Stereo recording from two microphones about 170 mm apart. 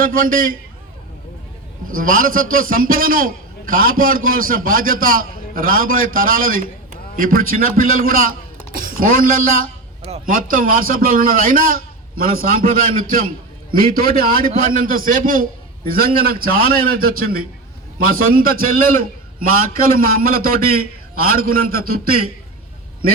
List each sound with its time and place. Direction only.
0.0 s a man's voice: 55° right (ahead or behind)
2.0 s a man's voice: 55° right (ahead or behind)